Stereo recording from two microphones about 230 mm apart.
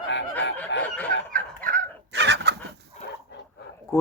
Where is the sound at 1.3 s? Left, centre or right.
Right.